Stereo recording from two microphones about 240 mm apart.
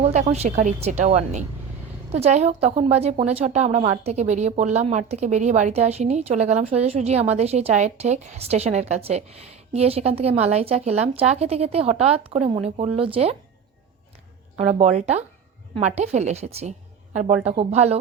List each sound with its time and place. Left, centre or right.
0.0 s speech: right
14.5 s speech: right